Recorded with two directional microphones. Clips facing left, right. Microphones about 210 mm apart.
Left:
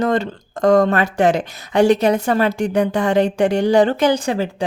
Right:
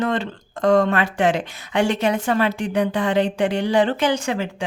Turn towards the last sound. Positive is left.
turn(degrees=35)  # may be behind; listen again after turning